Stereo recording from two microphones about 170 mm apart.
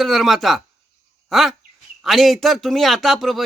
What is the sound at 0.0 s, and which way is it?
Speech, centre (ahead or behind).